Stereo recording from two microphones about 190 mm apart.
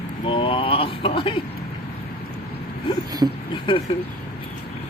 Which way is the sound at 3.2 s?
20° right (ahead or behind).